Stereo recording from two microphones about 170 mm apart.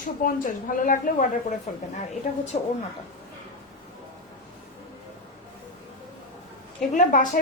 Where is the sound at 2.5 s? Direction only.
40° left (ahead or behind).